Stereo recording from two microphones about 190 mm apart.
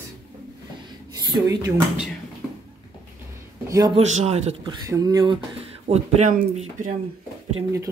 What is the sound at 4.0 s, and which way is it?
Speech, 35° right (ahead or behind).